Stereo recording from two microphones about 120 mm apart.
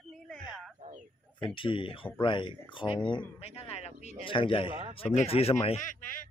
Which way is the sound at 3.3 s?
55° left (ahead or behind).